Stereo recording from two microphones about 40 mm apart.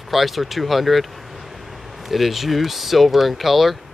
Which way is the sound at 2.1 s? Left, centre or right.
Centre.